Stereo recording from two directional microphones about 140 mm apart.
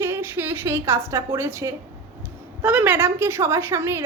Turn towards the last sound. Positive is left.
turn(degrees=-20)  # may be behind; listen again after turning